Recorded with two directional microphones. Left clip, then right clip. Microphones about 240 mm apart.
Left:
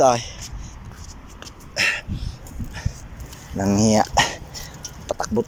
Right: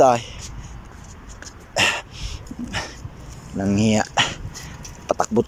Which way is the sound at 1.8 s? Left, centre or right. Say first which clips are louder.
Right 2 dB; centre.